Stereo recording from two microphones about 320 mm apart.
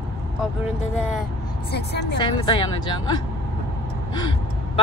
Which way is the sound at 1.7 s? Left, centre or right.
Left.